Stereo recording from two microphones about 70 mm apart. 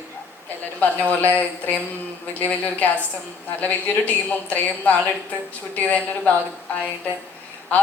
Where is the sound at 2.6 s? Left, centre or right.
Left.